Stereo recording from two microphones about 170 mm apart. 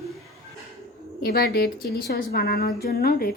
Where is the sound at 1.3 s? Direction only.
65° left (ahead or behind).